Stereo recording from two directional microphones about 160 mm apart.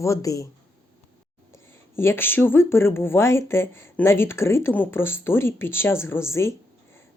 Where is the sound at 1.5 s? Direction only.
15° left (ahead or behind).